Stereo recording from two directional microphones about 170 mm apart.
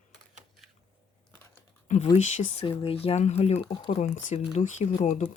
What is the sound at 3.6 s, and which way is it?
Speech, 25° left (ahead or behind).